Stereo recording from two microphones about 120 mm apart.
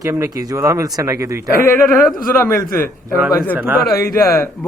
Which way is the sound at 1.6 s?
20° left (ahead or behind).